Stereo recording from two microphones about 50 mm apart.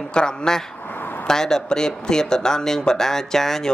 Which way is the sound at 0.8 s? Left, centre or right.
Left.